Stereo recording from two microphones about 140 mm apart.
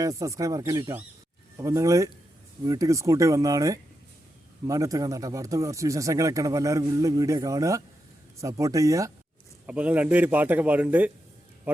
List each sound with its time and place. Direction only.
0.0 s speech: 25° right (ahead or behind)
9.6 s a man's voice: 10° right (ahead or behind)